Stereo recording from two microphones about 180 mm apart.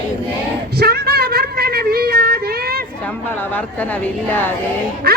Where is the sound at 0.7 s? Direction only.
60° right (ahead or behind).